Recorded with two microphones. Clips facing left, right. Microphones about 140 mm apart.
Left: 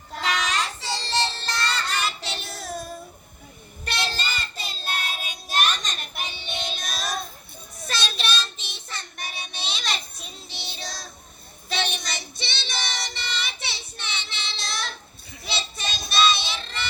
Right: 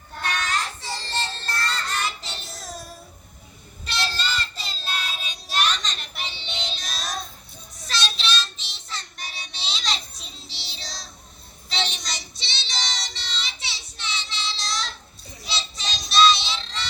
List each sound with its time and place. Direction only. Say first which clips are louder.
0.1 s child singing: left 1 dB; 90° left; by 2.8 s 65° left (ahead or behind)
3.8 s child singing: right 1 dB; 55° left (ahead or behind)